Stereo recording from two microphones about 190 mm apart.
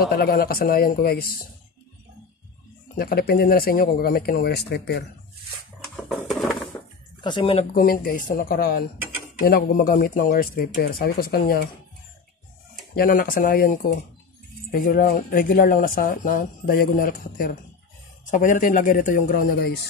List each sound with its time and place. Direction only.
0.0 s speech: 55° left (ahead or behind)
3.0 s speech: 55° left (ahead or behind)
6.0 s a sound: centre (ahead or behind)
7.2 s speech: 25° left (ahead or behind)
7.7 s speech: 50° left (ahead or behind)
12.9 s speech: 50° left (ahead or behind)